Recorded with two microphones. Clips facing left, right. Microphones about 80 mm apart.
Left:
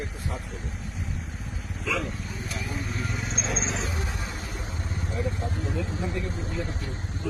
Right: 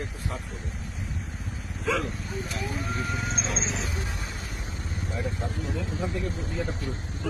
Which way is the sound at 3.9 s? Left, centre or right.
Left.